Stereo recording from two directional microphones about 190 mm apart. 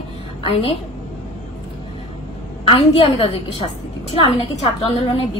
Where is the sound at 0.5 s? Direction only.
30° left (ahead or behind).